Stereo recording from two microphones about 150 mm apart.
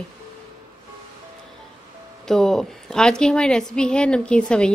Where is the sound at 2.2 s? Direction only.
5° left (ahead or behind).